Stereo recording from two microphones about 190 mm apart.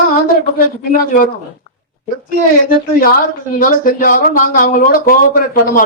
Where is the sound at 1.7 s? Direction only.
50° right (ahead or behind).